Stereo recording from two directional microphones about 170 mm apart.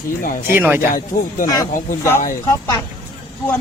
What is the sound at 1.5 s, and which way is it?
Speech, 20° left (ahead or behind).